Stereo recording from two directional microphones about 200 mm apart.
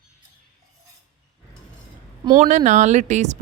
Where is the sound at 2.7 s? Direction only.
35° right (ahead or behind).